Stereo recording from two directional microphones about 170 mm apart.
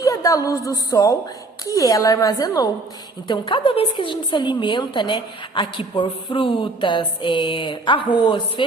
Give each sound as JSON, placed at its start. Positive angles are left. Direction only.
{"t": 0.0, "sound": "a woman's voice", "side_deg": 20}